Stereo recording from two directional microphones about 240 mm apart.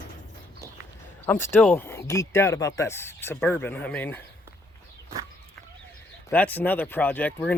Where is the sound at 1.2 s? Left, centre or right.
Centre.